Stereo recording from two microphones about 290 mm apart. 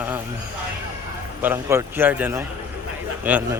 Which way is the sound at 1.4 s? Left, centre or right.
Centre.